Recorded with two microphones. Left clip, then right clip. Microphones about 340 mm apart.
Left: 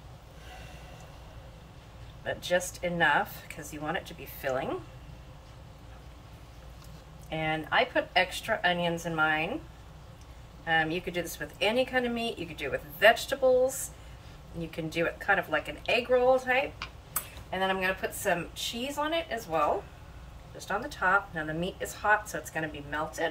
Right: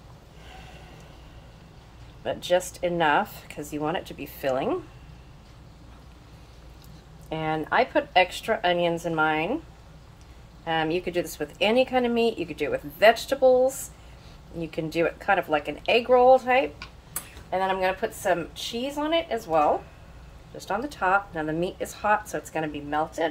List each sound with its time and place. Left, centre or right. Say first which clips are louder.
2.2 s speech: right 5 dB; centre
7.2 s speech: right 4 dB; centre
10.6 s speech: right 2 dB; centre
14.7 s a woman's voice: right 5 dB; centre